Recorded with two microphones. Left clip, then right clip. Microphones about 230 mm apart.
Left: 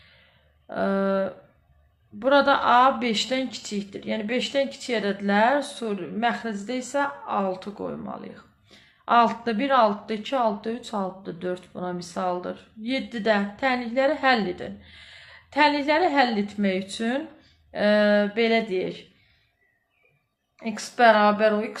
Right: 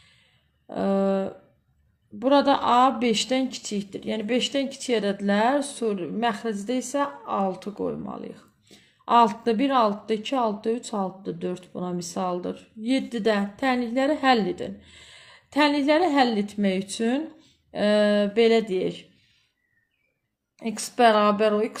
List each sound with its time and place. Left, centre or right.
0.7 s a sound: right
2.1 s speech: right
20.6 s speech: right